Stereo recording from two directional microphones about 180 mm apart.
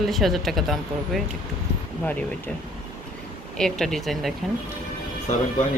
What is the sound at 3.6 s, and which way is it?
Speech, centre (ahead or behind).